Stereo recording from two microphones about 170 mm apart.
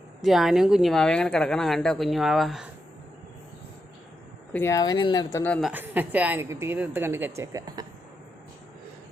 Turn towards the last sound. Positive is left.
turn(degrees=-20)  # may be behind; listen again after turning